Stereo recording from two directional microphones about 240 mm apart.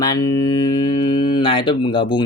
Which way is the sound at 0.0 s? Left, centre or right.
Centre.